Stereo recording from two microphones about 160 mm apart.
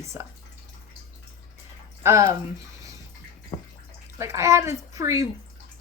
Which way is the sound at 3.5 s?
30° left (ahead or behind).